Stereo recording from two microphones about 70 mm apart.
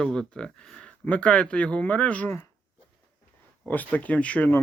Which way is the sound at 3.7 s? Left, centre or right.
Left.